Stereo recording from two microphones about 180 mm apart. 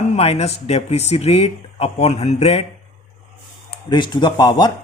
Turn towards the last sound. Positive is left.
turn(degrees=20)  # may be behind; listen again after turning